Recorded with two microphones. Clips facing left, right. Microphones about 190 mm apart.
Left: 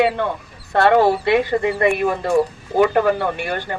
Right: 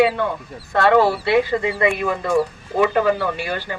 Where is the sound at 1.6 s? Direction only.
50° left (ahead or behind).